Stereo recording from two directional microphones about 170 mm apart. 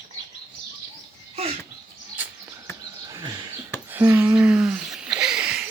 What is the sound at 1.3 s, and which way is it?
Bird, 35° right (ahead or behind).